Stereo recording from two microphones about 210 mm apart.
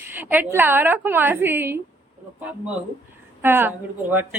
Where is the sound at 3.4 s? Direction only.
10° right (ahead or behind).